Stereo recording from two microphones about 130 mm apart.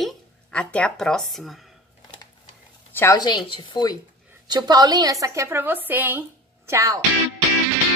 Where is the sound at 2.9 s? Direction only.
20° left (ahead or behind).